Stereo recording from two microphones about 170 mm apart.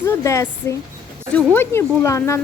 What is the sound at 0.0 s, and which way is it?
A woman's voice, 15° left (ahead or behind).